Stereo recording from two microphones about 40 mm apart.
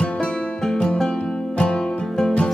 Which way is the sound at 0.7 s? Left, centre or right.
Centre.